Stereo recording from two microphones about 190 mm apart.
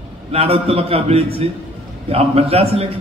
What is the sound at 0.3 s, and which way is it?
A man's voice, 30° right (ahead or behind).